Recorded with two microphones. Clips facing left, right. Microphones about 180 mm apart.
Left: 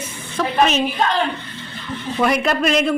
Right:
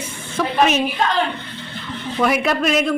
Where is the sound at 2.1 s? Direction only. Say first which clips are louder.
Even; 5° right (ahead or behind).